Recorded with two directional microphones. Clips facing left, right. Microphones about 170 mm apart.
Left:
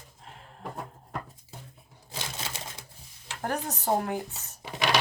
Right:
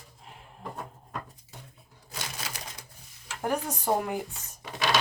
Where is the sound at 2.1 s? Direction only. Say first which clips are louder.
Left 1 dB; 25° left (ahead or behind).